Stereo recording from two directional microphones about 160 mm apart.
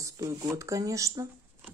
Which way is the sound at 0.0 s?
20° right (ahead or behind).